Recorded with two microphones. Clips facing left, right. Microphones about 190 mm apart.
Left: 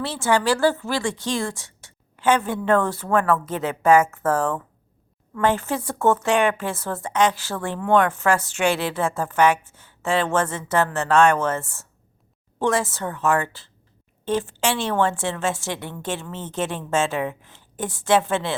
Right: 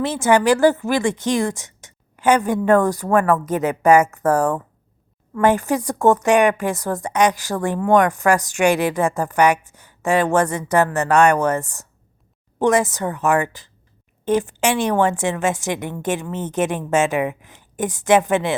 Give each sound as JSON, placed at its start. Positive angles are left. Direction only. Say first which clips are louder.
{"t": 0.0, "sound": "speech", "louder": "right 5 dB", "side_deg": -20}